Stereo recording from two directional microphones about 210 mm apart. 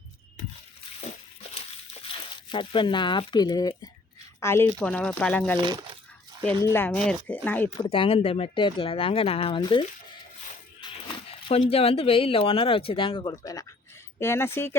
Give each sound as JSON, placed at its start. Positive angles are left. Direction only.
{"t": 1.5, "sound": "a sound", "side_deg": 25}
{"t": 4.4, "sound": "speech", "side_deg": 10}
{"t": 6.7, "sound": "speech", "side_deg": 10}
{"t": 7.8, "sound": "speech", "side_deg": 25}
{"t": 10.8, "sound": "a sound", "side_deg": 25}
{"t": 11.7, "sound": "speech", "side_deg": 25}